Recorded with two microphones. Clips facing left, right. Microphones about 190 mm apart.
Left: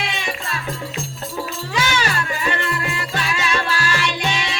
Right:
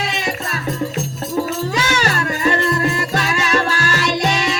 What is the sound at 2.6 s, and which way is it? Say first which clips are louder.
Music: right 7 dB; 40° right (ahead or behind).